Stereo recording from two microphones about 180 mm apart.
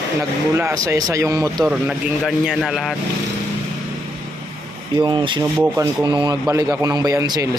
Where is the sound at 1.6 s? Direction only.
Centre (ahead or behind).